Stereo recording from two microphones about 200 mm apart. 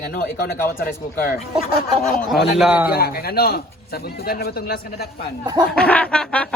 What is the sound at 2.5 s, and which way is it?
Speech, 5° right (ahead or behind).